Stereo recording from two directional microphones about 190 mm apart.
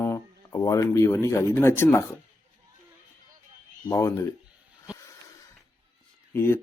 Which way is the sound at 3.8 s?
15° left (ahead or behind).